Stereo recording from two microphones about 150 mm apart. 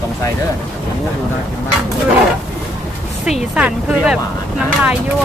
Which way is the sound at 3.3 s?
5° right (ahead or behind).